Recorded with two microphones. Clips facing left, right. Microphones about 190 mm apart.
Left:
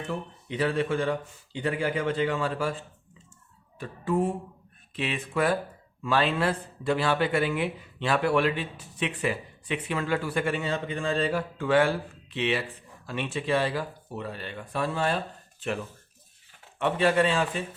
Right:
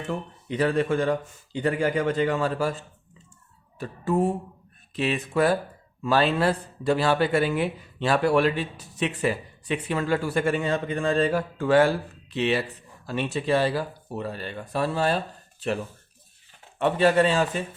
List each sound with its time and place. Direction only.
0.1 s speech: 45° right (ahead or behind)